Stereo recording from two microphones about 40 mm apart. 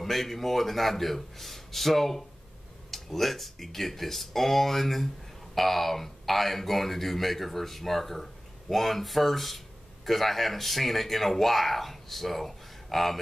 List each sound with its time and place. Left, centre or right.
0.0 s speech: centre